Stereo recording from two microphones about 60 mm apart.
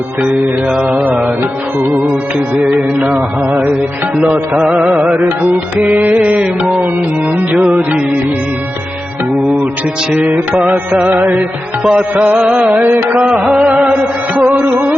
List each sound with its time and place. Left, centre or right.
0.9 s music: centre
2.6 s music: right
4.2 s music: centre
10.7 s music: centre
11.1 s carnatic music: right
11.8 s music: centre
12.4 s music: centre
12.7 s carnatic music: right
13.1 s music: right